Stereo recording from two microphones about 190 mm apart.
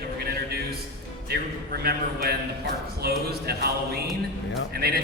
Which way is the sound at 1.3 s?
55° right (ahead or behind).